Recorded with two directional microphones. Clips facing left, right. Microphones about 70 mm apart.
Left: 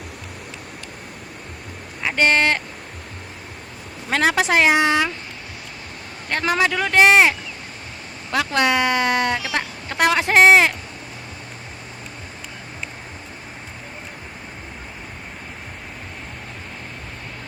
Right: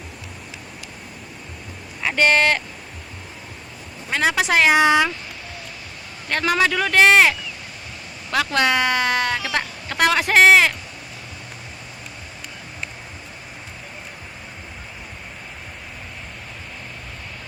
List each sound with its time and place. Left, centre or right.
2.1 s speech: left
4.1 s a woman's voice: left
4.4 s speech: left
4.7 s speech: centre
6.2 s speech: left
8.4 s speech: left